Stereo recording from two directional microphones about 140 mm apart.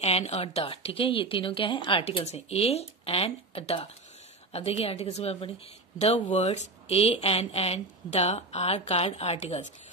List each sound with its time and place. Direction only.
0.0 s speech: 50° left (ahead or behind)